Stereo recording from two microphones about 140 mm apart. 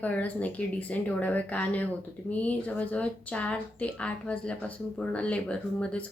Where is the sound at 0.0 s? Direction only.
10° left (ahead or behind).